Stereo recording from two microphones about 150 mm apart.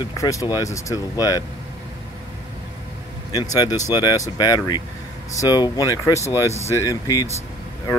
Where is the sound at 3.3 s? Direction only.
25° left (ahead or behind).